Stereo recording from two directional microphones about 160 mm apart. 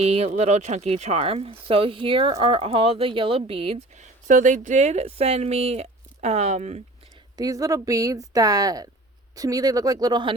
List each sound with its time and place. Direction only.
0.0 s speech: 40° right (ahead or behind)
7.3 s speech: 20° right (ahead or behind)